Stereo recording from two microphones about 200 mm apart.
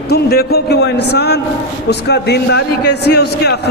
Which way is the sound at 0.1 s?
55° left (ahead or behind).